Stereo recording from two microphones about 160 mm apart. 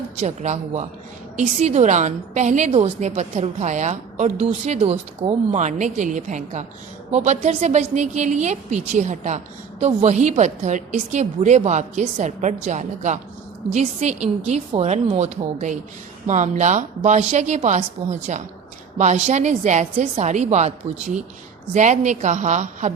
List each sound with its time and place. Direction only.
0.2 s a woman's voice: 45° right (ahead or behind)